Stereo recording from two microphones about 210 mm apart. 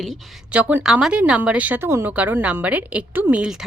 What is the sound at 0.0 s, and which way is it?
A woman's voice, 5° right (ahead or behind).